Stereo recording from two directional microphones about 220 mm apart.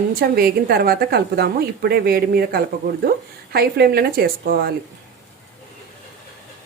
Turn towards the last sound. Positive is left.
turn(degrees=-45)  # may be behind; listen again after turning